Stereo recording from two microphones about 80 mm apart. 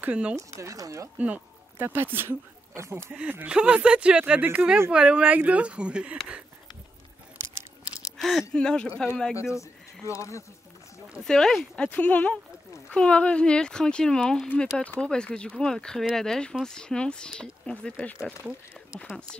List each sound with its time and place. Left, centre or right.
0.0 s speech: centre
0.6 s speech: right
1.1 s speech: centre
1.8 s speech: right
3.2 s speech: centre
8.2 s speech: centre
9.4 s speech: left
11.2 s speech: centre